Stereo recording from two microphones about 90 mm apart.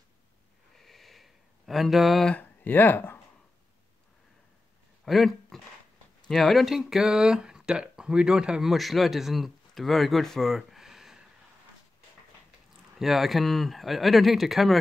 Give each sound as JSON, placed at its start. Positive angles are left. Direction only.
{"t": 0.7, "sound": "a sound", "side_deg": 0}
{"t": 2.3, "sound": "speech", "side_deg": 20}
{"t": 5.0, "sound": "speech", "side_deg": 0}
{"t": 13.0, "sound": "speech", "side_deg": 0}